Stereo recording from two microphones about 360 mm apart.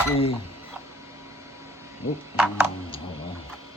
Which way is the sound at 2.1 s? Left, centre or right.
Centre.